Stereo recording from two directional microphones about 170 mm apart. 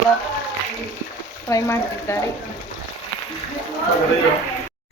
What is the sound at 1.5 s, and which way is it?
Speech, 20° left (ahead or behind).